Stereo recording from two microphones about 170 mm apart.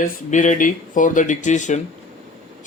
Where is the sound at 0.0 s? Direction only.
45° left (ahead or behind).